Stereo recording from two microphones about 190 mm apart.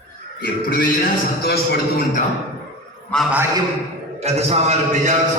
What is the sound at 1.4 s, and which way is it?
Speech, 60° left (ahead or behind).